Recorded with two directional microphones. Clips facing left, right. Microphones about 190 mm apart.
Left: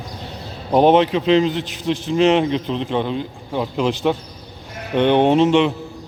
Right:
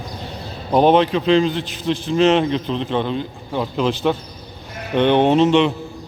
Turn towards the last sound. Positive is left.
turn(degrees=10)  # may be behind; listen again after turning